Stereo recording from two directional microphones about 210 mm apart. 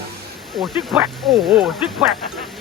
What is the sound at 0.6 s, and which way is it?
Speech, 10° right (ahead or behind).